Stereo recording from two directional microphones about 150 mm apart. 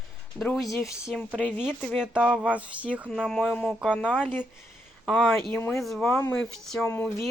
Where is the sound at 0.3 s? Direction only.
5° left (ahead or behind).